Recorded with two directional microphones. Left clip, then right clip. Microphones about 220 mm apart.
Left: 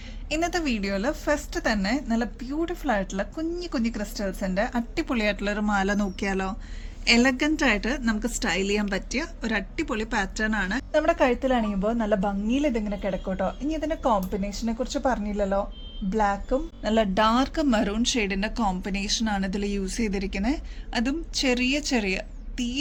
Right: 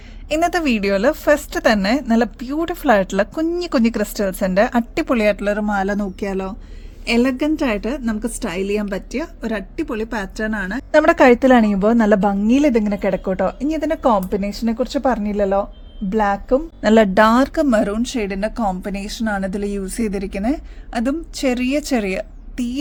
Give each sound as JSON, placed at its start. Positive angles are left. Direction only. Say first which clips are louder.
{"t": 0.3, "sound": "a woman's voice", "louder": "right 9 dB", "side_deg": -50}
{"t": 10.9, "sound": "a woman's voice", "louder": "right 11 dB", "side_deg": -55}